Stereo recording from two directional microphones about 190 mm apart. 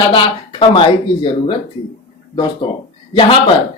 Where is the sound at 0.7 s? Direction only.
30° left (ahead or behind).